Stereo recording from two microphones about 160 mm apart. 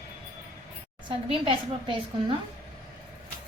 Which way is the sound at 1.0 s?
35° right (ahead or behind).